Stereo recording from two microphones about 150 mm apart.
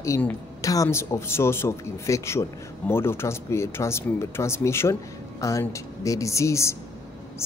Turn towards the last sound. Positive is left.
turn(degrees=20)  # may be behind; listen again after turning